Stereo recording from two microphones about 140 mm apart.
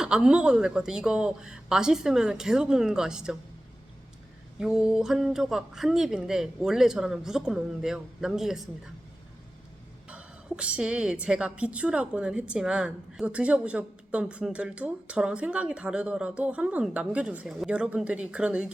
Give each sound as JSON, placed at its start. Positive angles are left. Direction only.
{"t": 0.0, "sound": "speech", "side_deg": -5}
{"t": 4.6, "sound": "speech", "side_deg": -5}
{"t": 10.1, "sound": "a woman's voice", "side_deg": -10}